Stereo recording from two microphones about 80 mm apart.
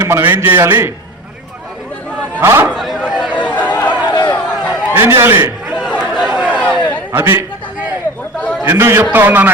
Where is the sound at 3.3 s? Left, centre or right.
Centre.